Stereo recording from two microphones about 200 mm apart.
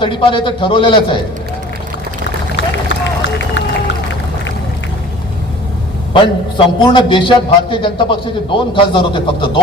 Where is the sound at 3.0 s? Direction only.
65° left (ahead or behind).